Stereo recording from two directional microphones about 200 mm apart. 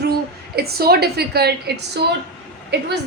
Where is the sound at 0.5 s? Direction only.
50° right (ahead or behind).